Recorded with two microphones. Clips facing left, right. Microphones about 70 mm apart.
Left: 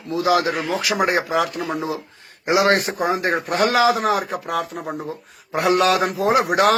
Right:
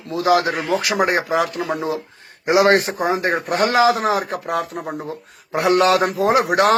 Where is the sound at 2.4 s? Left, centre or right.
Right.